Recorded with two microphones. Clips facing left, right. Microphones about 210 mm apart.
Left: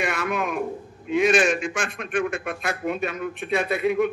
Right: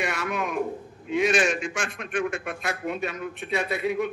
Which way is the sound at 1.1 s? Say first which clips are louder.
Left 3 dB; 55° left (ahead or behind).